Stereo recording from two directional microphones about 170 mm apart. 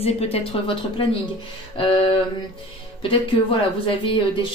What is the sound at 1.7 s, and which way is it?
Speech, 30° left (ahead or behind).